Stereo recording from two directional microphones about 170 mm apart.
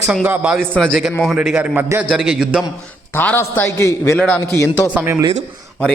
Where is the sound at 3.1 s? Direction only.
10° left (ahead or behind).